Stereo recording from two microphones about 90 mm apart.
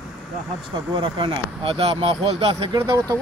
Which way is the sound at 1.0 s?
75° right (ahead or behind).